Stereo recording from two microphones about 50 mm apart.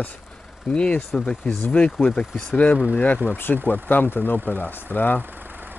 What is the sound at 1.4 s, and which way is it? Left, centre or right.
Speech, left.